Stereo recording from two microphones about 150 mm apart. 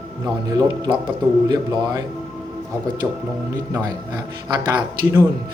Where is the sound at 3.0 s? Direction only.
5° right (ahead or behind).